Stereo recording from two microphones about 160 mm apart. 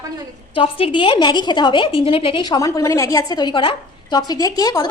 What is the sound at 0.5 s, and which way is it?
A woman's voice, 35° left (ahead or behind).